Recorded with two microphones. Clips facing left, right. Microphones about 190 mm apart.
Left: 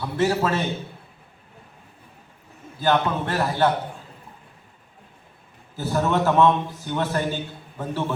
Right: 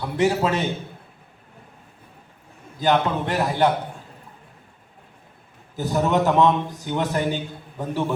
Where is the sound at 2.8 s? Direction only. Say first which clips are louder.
Right 1 dB; 15° right (ahead or behind).